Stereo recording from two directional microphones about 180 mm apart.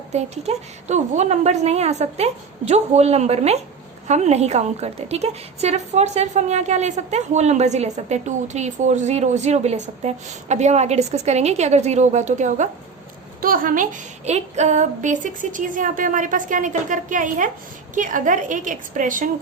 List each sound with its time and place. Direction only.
0.1 s a woman's voice: 40° right (ahead or behind)